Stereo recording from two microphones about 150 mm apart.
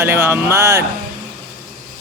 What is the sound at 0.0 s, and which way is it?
Speech, 15° right (ahead or behind).